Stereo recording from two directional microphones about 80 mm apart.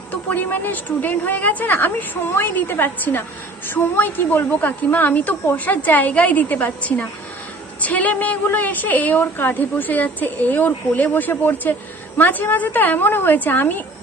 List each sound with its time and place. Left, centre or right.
0.3 s a woman's voice: left